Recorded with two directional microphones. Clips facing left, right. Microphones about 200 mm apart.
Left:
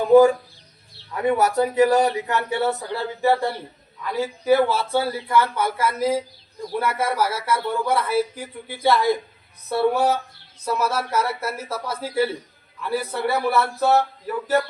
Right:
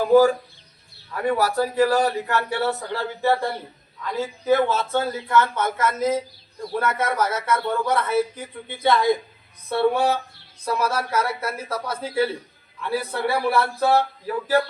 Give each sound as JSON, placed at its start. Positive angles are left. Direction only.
{"t": 0.0, "sound": "chicken", "side_deg": 25}
{"t": 1.1, "sound": "a man's voice", "side_deg": 20}